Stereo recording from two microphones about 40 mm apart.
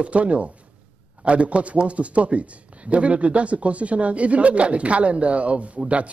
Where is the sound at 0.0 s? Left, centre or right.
Right.